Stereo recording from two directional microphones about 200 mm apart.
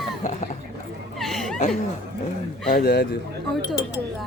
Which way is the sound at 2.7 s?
50° left (ahead or behind).